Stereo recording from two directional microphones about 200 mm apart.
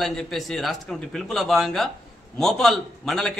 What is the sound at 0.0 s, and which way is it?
A man's voice, centre (ahead or behind).